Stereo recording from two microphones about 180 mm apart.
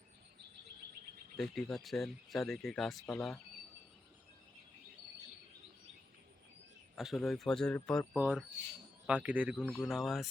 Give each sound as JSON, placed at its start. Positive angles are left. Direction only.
{"t": 1.4, "sound": "speech", "side_deg": 0}
{"t": 6.9, "sound": "speech", "side_deg": 0}
{"t": 8.1, "sound": "speech", "side_deg": -5}